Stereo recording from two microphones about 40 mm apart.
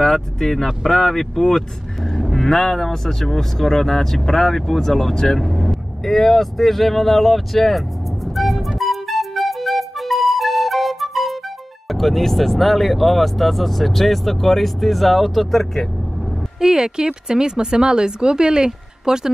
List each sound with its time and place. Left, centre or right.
0.0 s speech: centre
8.4 s music: centre
11.9 s speech: centre
16.5 s speech: centre